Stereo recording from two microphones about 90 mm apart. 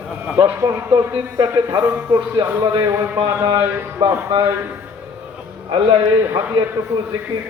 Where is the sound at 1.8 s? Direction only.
10° right (ahead or behind).